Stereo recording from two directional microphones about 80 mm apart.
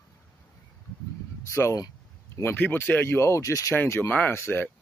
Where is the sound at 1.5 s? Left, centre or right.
Left.